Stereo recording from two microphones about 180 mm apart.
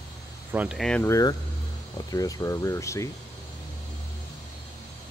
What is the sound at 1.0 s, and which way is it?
Speech, 20° left (ahead or behind).